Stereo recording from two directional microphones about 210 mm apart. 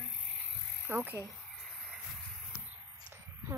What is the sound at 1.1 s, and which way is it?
Speech, 10° left (ahead or behind).